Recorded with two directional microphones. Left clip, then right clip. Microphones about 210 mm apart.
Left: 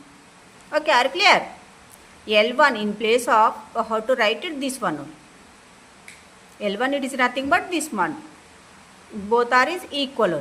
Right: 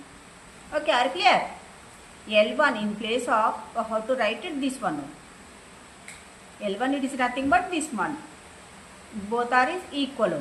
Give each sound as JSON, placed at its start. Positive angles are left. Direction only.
{"t": 0.7, "sound": "a woman's voice", "side_deg": 55}
{"t": 6.6, "sound": "a woman's voice", "side_deg": 55}
{"t": 9.3, "sound": "a woman's voice", "side_deg": 55}